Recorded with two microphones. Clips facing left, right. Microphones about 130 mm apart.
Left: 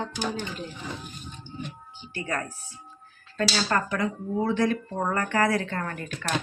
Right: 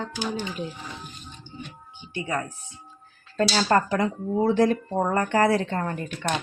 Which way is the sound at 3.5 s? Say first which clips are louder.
Right 6 dB; 35° right (ahead or behind).